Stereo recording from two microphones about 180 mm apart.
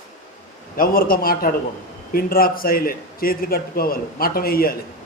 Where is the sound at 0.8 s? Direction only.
55° left (ahead or behind).